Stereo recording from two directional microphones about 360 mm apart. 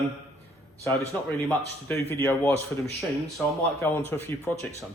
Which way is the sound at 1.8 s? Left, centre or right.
Centre.